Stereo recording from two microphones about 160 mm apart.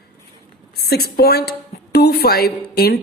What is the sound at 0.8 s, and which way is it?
A woman's voice, 80° left.